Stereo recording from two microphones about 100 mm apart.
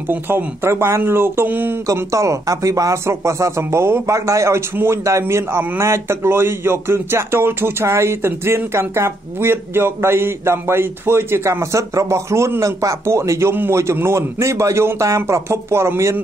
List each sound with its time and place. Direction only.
0.1 s speech: 20° right (ahead or behind)
1.9 s speech: 30° right (ahead or behind)